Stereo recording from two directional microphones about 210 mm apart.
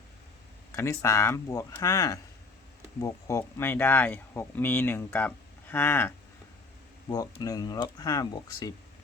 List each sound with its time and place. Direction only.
0.8 s speech: 15° left (ahead or behind)